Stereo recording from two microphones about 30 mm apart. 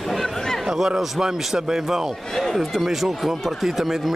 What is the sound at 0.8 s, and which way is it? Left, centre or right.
A man's voice, centre.